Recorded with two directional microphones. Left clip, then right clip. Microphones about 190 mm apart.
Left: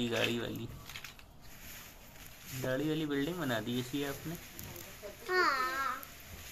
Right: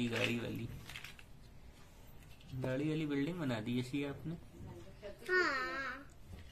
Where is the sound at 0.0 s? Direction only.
Centre (ahead or behind).